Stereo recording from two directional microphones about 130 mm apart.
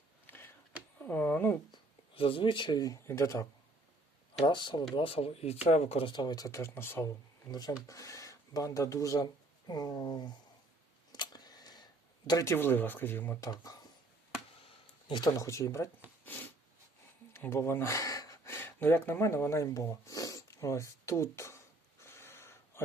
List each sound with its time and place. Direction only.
0.3 s a sound: 15° left (ahead or behind)
1.7 s speech: 45° left (ahead or behind); by 3.4 s 20° left (ahead or behind)
4.4 s speech: 35° left (ahead or behind)
11.1 s a sound: 30° left (ahead or behind)
12.3 s speech: 25° left (ahead or behind)
12.5 s speech: 15° left (ahead or behind)
13.5 s speech: 30° left (ahead or behind)
15.1 s speech: 30° left (ahead or behind)
16.2 s snort: 15° left (ahead or behind)
17.3 s speech: 20° left (ahead or behind)
22.0 s a sound: 20° left (ahead or behind)